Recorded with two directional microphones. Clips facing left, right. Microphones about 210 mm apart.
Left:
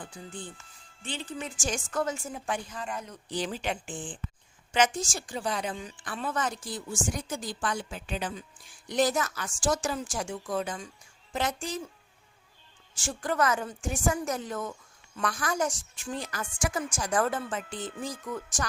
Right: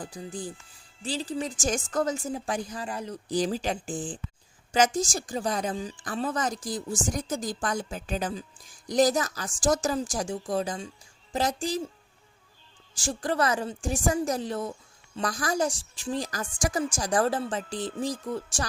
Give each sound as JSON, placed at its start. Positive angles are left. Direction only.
{"t": 0.0, "sound": "a woman's voice", "side_deg": -35}
{"t": 13.0, "sound": "a woman's voice", "side_deg": -35}